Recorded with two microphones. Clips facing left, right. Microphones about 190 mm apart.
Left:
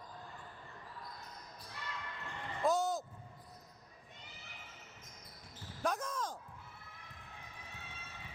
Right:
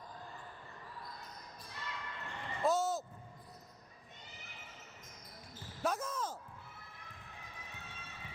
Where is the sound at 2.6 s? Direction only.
Centre (ahead or behind).